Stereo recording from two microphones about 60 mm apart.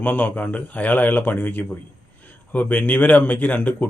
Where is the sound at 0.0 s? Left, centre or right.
Left.